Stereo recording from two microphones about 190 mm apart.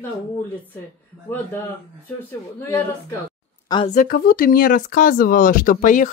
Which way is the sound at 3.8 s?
45° left (ahead or behind).